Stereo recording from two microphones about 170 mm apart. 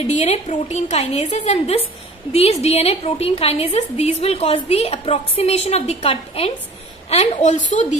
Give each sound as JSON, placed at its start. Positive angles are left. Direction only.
{"t": 0.0, "sound": "a woman's voice", "side_deg": 40}